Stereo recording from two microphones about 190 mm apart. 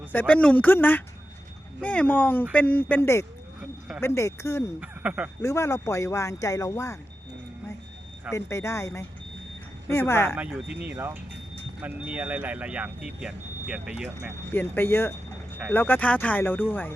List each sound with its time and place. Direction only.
0.1 s speech: 10° left (ahead or behind)
3.6 s a sound: 5° right (ahead or behind)
4.0 s speech: 15° left (ahead or behind)
4.8 s speech: 5° right (ahead or behind)
5.4 s speech: 15° left (ahead or behind)
8.3 s speech: 15° left (ahead or behind)
10.3 s speech: 5° right (ahead or behind)
14.5 s speech: 10° left (ahead or behind)